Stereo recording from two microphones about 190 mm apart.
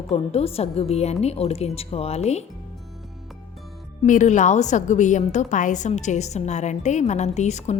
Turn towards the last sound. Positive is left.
turn(degrees=35)  # may be behind; listen again after turning